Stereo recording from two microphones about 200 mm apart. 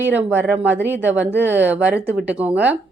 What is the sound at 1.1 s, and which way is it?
A woman's voice, 10° right (ahead or behind).